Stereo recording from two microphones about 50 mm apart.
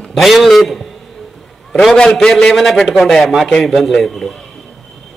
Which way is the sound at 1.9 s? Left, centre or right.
Centre.